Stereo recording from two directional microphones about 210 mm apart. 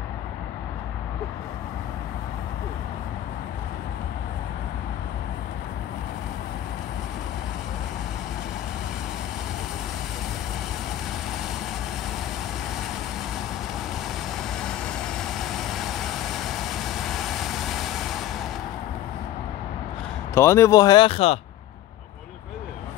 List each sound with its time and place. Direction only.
14.6 s vehicle: 5° left (ahead or behind)
20.3 s speech: 15° left (ahead or behind)